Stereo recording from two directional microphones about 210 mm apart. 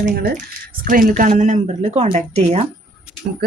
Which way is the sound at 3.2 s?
45° right (ahead or behind).